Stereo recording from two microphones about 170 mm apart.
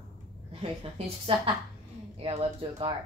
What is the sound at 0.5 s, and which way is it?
Speech, 35° right (ahead or behind).